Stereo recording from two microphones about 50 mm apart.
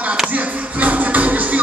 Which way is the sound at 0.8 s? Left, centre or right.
Right.